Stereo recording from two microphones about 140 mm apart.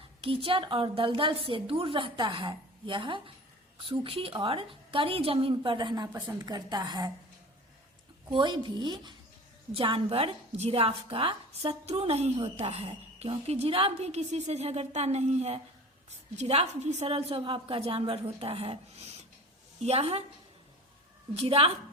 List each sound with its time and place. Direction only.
0.2 s a woman's voice: 40° right (ahead or behind)
8.3 s a woman's voice: 35° right (ahead or behind)
21.3 s a woman's voice: 45° right (ahead or behind)